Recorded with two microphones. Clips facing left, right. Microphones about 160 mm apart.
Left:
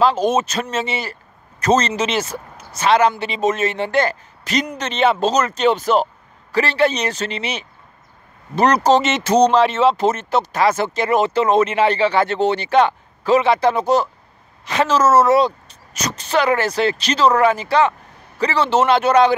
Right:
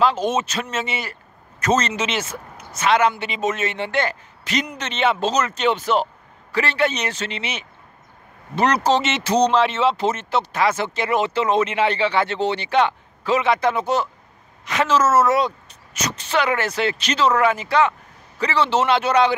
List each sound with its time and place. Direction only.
0.0 s speech: 40° left (ahead or behind)